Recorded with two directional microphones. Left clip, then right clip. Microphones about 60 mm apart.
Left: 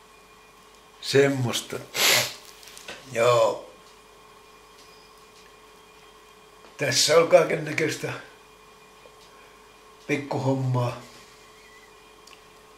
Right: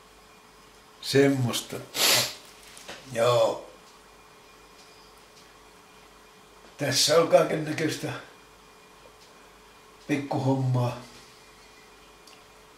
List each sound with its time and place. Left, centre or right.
1.0 s speech: left
3.1 s speech: left
6.8 s speech: left
10.0 s speech: left